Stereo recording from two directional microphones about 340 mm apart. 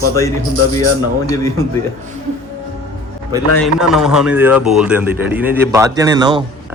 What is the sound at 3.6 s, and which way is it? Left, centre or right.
Speech, centre.